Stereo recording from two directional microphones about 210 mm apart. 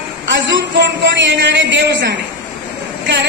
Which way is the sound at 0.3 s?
60° right (ahead or behind).